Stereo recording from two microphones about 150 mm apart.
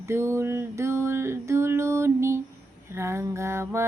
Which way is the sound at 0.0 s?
15° right (ahead or behind).